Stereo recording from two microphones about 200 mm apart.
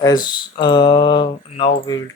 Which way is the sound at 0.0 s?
20° left (ahead or behind).